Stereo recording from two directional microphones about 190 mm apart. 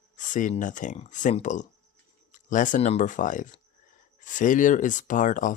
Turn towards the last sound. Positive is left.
turn(degrees=45)  # may be behind; listen again after turning